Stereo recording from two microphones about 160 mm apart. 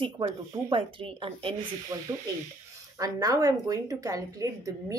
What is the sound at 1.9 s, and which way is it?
A woman's voice, 20° right (ahead or behind).